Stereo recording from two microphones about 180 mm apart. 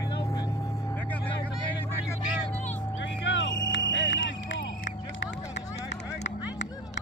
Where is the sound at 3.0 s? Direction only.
90° left.